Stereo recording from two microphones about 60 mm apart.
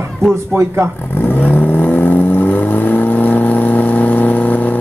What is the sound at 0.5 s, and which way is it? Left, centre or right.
Speech, right.